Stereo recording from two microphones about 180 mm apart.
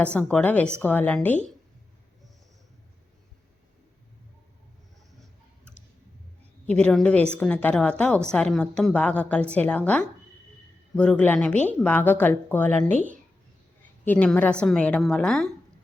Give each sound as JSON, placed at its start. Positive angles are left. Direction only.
{"t": 0.0, "sound": "speech", "side_deg": 5}
{"t": 6.7, "sound": "speech", "side_deg": 5}
{"t": 14.0, "sound": "a woman's voice", "side_deg": 10}